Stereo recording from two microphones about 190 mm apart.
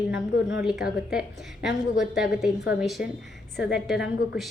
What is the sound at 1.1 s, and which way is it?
A woman's voice, 5° right (ahead or behind).